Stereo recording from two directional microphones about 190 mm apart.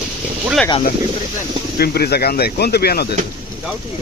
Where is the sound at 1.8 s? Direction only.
55° left (ahead or behind).